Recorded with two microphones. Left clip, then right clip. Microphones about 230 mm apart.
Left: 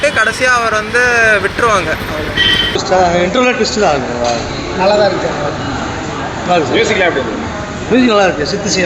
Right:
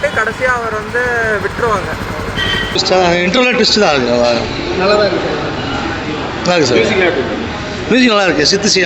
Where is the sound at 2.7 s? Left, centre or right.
Right.